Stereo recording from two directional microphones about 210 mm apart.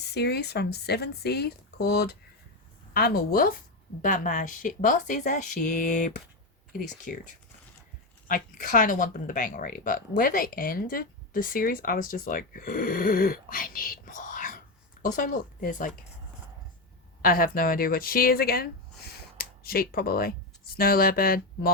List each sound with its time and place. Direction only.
0.1 s speech: 50° left (ahead or behind)
8.3 s speech: 40° left (ahead or behind)
17.2 s speech: 45° left (ahead or behind)